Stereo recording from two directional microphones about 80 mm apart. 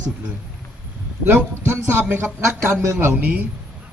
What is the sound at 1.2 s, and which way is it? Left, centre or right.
A man's voice, right.